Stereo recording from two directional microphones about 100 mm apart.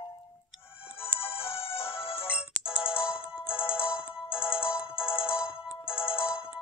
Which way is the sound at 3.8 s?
10° right (ahead or behind).